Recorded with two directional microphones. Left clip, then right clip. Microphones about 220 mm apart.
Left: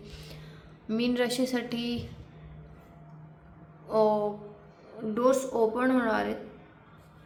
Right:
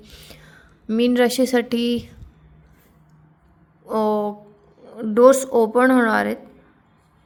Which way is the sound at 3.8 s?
40° right (ahead or behind).